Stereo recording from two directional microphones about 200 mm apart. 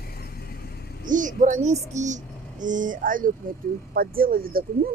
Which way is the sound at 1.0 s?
40° right (ahead or behind).